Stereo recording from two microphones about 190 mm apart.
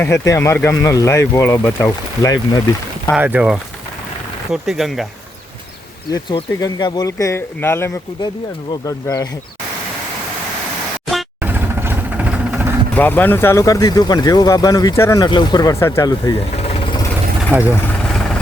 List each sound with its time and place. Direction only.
0.0 s speech: 15° left (ahead or behind)
3.2 s speech: 10° right (ahead or behind)
6.1 s speech: 20° left (ahead or behind)
11.1 s vehicle: 10° right (ahead or behind)
12.9 s speech: 10° left (ahead or behind)
16.6 s vehicle: 30° left (ahead or behind)
17.5 s speech: 10° right (ahead or behind)
17.8 s vehicle: 5° left (ahead or behind)